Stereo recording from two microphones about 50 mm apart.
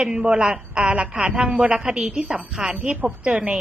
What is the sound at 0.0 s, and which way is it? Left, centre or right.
A woman's voice, right.